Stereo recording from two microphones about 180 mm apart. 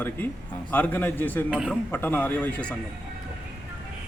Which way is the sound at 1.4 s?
5° right (ahead or behind).